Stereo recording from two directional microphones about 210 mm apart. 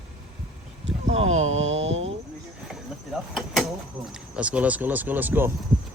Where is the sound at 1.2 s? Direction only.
70° right (ahead or behind).